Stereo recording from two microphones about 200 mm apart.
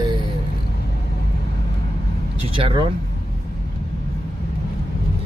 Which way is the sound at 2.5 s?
25° right (ahead or behind).